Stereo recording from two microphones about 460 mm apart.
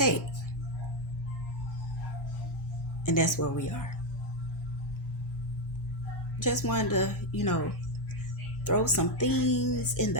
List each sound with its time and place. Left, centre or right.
3.1 s speech: left
6.4 s speech: left
8.6 s speech: left